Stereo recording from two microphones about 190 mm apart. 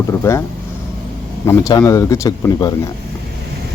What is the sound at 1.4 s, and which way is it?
Speech, 15° left (ahead or behind).